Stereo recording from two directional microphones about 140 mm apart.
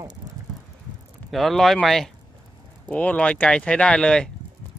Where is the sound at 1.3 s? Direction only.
Centre (ahead or behind).